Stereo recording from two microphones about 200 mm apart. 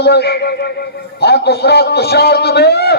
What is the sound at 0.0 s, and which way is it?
A man's voice, 55° left (ahead or behind).